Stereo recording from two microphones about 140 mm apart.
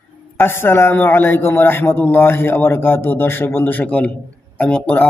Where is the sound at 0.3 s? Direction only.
15° left (ahead or behind).